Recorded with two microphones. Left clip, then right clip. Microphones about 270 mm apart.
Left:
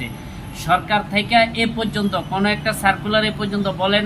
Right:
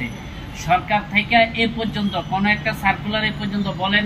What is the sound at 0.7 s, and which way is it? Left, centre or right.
A man's voice, centre.